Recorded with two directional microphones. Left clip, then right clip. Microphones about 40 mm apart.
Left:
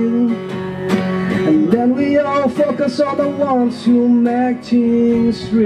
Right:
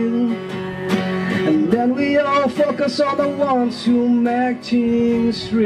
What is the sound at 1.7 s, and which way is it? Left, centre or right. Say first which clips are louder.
Speech: left 2 dB; right.